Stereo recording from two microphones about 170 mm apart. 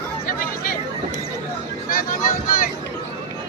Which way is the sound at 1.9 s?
55° left (ahead or behind).